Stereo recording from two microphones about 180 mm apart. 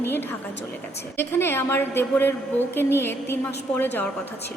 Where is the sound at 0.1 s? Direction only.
10° left (ahead or behind).